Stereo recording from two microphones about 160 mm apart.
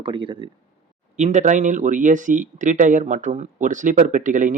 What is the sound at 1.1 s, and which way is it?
Speech, 50° right (ahead or behind).